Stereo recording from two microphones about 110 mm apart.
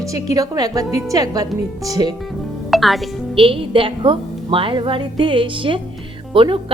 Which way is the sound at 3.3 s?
55° right (ahead or behind).